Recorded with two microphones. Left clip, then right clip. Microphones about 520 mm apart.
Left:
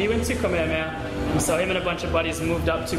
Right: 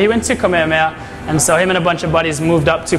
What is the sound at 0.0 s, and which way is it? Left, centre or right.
A man's voice, right.